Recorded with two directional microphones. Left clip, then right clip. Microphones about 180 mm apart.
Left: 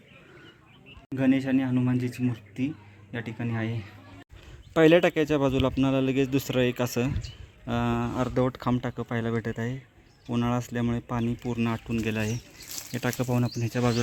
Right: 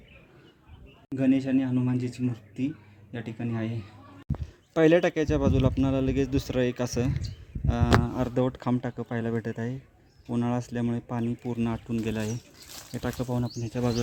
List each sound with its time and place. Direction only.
1.1 s speech: centre (ahead or behind)
13.1 s speech: 20° left (ahead or behind)
13.6 s speech: 10° left (ahead or behind)